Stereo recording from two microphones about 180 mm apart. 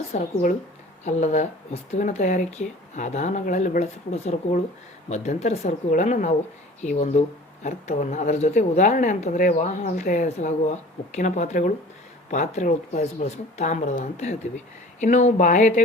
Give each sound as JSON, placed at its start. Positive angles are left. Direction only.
{"t": 0.1, "sound": "speech", "side_deg": 40}